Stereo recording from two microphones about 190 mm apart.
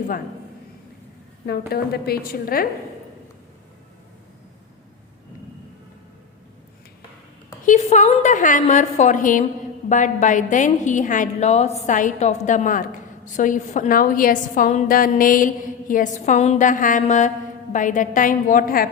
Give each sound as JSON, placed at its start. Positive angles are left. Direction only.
{"t": 1.5, "sound": "a woman's voice", "side_deg": 55}
{"t": 7.6, "sound": "a woman's voice", "side_deg": 40}